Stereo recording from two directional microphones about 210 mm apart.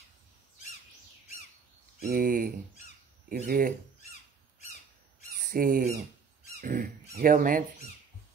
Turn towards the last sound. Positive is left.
turn(degrees=-40)  # may be behind; listen again after turning